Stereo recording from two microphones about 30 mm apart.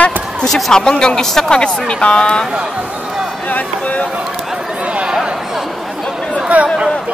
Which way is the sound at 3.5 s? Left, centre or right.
Left.